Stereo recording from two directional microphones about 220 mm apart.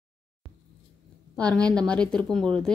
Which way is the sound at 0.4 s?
20° left (ahead or behind).